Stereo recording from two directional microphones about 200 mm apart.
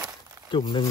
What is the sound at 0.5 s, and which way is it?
Speech, 25° left (ahead or behind).